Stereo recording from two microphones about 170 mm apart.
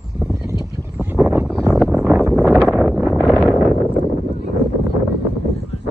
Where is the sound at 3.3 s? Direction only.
5° right (ahead or behind).